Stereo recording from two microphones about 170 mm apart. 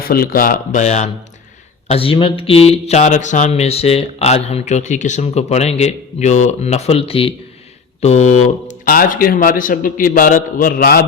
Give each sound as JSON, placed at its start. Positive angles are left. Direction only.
{"t": 0.1, "sound": "speech", "side_deg": 60}